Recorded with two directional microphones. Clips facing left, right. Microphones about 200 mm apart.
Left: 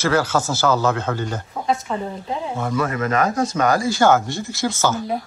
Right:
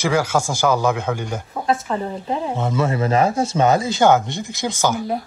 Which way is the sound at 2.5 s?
20° right (ahead or behind).